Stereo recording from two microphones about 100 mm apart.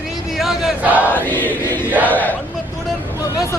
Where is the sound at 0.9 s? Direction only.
15° right (ahead or behind).